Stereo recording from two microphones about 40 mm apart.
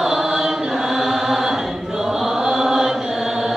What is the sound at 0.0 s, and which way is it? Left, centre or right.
Chant, centre.